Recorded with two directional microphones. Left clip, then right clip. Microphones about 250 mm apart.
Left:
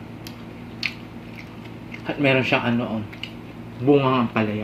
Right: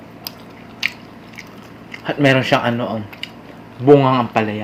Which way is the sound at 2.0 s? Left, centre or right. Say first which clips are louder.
Right 5 dB; right.